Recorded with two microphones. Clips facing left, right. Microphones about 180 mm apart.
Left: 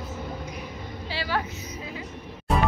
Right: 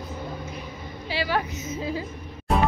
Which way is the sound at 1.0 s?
15° right (ahead or behind).